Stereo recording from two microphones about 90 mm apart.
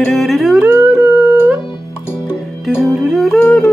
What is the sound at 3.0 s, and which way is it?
Music, 5° right (ahead or behind).